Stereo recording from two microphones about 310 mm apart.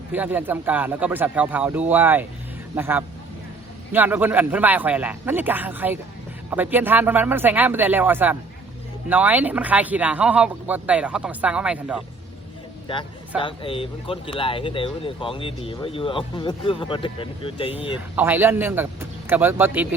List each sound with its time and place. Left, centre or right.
0.1 s a man's voice: centre
13.4 s speech: centre
18.2 s a man's voice: centre